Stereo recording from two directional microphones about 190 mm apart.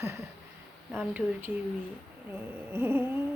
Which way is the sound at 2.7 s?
10° right (ahead or behind).